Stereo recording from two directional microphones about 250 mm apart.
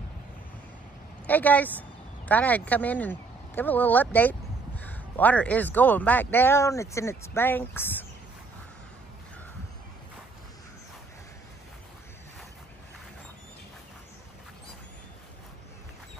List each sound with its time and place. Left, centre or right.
1.2 s speech: centre